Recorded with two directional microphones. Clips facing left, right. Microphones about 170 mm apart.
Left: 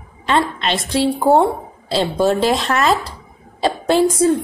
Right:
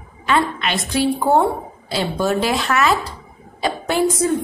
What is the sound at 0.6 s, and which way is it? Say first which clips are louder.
A woman's voice: left 2 dB; 30° left (ahead or behind).